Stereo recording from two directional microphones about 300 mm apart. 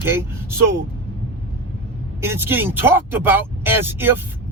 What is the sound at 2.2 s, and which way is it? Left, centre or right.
Speech, centre.